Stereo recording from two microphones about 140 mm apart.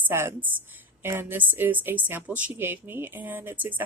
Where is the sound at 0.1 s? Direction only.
15° right (ahead or behind).